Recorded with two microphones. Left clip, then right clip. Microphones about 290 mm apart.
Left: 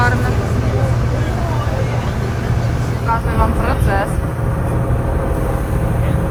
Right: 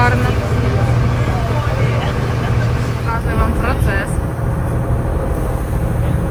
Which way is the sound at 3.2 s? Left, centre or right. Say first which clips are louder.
Left 1 dB; centre.